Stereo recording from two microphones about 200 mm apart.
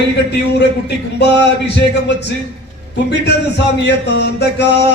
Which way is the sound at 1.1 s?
60° left (ahead or behind).